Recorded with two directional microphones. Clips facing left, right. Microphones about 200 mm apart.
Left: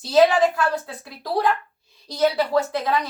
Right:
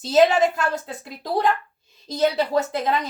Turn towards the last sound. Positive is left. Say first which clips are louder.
# even
turn(degrees=-20)  # may be behind; listen again after turning